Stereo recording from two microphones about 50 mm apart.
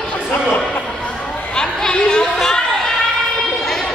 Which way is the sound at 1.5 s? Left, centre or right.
Centre.